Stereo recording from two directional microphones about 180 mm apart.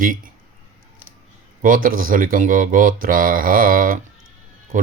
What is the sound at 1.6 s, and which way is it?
Speech, 50° right (ahead or behind).